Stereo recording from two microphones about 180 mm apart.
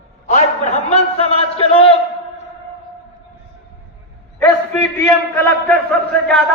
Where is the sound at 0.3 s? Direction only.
40° left (ahead or behind).